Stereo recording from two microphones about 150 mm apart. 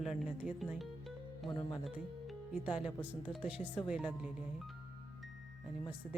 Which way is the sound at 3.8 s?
5° right (ahead or behind).